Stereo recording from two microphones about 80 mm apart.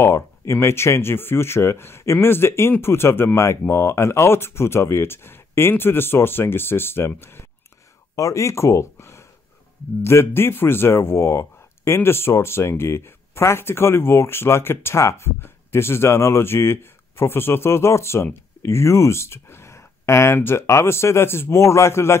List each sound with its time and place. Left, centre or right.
0.0 s speech: left